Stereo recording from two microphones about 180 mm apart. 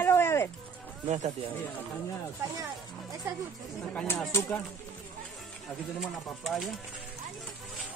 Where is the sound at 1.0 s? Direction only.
40° right (ahead or behind).